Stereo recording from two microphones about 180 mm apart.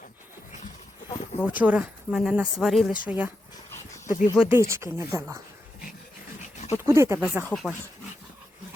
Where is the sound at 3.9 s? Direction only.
40° left (ahead or behind).